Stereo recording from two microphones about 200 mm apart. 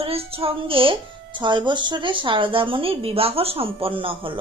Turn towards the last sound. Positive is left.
turn(degrees=-25)  # may be behind; listen again after turning